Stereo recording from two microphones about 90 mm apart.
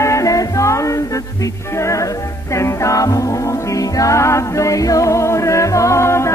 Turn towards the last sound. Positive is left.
turn(degrees=30)  # may be behind; listen again after turning